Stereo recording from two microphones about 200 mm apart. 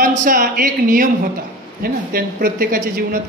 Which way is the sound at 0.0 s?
40° right (ahead or behind).